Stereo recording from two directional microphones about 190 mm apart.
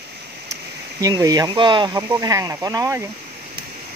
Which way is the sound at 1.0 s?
20° right (ahead or behind).